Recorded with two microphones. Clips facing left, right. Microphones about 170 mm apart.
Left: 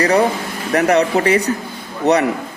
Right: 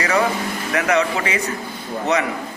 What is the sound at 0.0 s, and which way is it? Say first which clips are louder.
Speech: left 5 dB; 35° left (ahead or behind).